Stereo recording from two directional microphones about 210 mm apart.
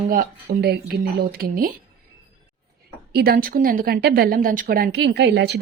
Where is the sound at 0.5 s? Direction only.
50° right (ahead or behind).